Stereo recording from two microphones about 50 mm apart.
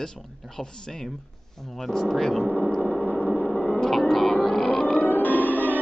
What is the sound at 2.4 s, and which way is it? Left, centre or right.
Speech, left.